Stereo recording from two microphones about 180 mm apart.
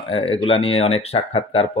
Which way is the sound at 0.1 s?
30° left (ahead or behind).